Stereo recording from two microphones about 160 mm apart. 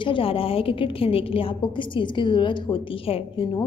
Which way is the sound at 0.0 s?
35° left (ahead or behind).